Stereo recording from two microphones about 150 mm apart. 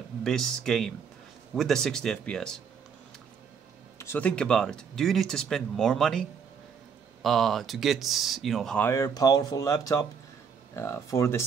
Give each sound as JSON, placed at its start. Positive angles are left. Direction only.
{"t": 0.2, "sound": "speech", "side_deg": 5}
{"t": 4.0, "sound": "speech", "side_deg": 10}
{"t": 8.8, "sound": "speech", "side_deg": 20}